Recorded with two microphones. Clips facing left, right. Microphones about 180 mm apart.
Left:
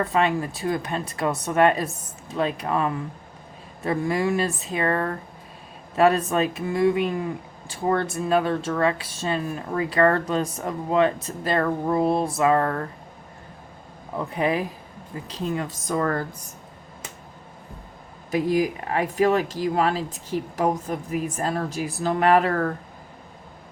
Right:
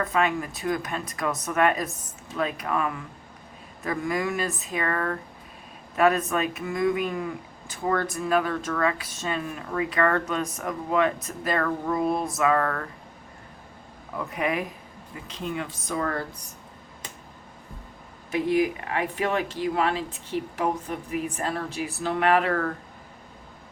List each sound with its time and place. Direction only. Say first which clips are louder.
0.0 s speech: left 3 dB; 30° left (ahead or behind)
14.2 s speech: left 4 dB; 30° left (ahead or behind)
18.3 s speech: left 1 dB; 40° left (ahead or behind)